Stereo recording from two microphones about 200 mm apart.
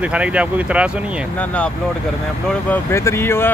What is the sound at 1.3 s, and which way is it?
Speech, 5° left (ahead or behind).